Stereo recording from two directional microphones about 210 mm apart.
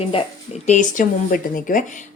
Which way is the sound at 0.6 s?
35° left (ahead or behind).